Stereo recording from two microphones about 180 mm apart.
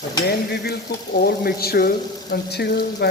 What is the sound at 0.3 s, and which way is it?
Speech, 65° left (ahead or behind).